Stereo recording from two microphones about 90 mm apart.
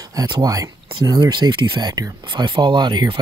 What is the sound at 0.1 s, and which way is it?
Speech, 45° right (ahead or behind).